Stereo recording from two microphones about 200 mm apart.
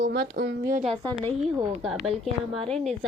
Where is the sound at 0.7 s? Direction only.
30° right (ahead or behind).